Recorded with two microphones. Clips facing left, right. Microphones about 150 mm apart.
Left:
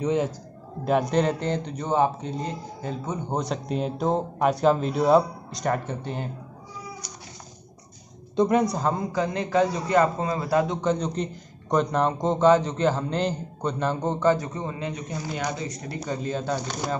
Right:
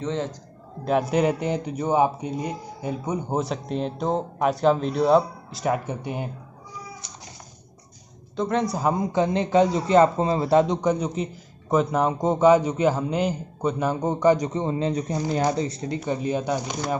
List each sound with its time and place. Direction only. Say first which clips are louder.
0.0 s a man's voice: left 3 dB; 10° left (ahead or behind)
0.8 s a man's voice: right 1 dB; centre (ahead or behind)
8.4 s a man's voice: left 4 dB; 10° left (ahead or behind)
8.6 s a man's voice: right 2 dB; 5° right (ahead or behind)
8.9 s a man's voice: right 4 dB; 20° right (ahead or behind)
16.1 s a man's voice: right 3 dB; 15° right (ahead or behind)